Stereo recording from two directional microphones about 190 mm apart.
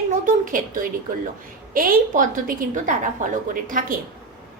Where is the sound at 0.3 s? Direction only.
45° right (ahead or behind).